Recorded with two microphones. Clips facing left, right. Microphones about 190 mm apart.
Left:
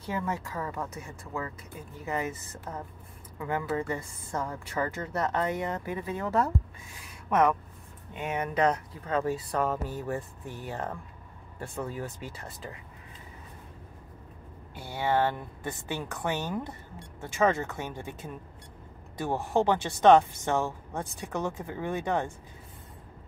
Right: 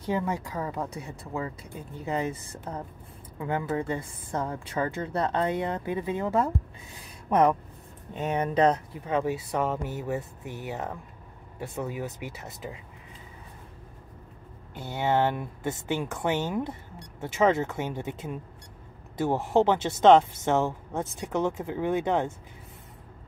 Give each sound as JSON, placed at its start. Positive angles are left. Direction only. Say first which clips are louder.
{"t": 0.0, "sound": "a woman's voice", "louder": "right 4 dB", "side_deg": -20}
{"t": 7.2, "sound": "speech", "louder": "right 2 dB", "side_deg": -30}
{"t": 9.0, "sound": "speech", "louder": "right 1 dB", "side_deg": -15}
{"t": 12.2, "sound": "a woman's voice", "louder": "right 3 dB", "side_deg": -20}
{"t": 14.7, "sound": "a woman's voice", "louder": "right 2 dB", "side_deg": -20}
{"t": 16.0, "sound": "speech", "louder": "right 2 dB", "side_deg": -10}
{"t": 16.3, "sound": "a woman's voice", "louder": "right 4 dB", "side_deg": -25}